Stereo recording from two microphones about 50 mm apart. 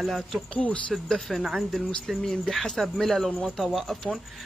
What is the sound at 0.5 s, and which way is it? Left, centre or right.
Speech, left.